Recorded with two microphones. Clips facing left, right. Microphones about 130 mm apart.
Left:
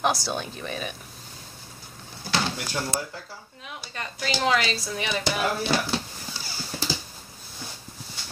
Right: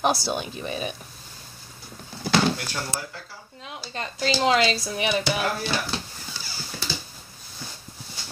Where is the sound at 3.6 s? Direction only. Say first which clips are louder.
Right 4 dB; 25° right (ahead or behind).